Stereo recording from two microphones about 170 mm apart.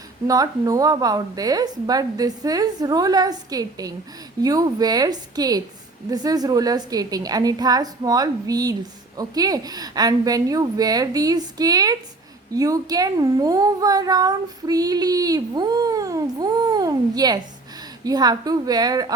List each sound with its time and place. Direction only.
0.3 s a child's voice: 20° right (ahead or behind)